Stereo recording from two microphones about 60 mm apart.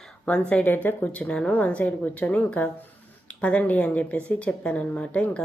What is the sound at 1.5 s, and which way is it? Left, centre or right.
A woman's voice, left.